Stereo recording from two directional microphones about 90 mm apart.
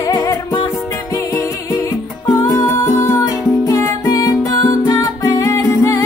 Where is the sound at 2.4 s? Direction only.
30° left (ahead or behind).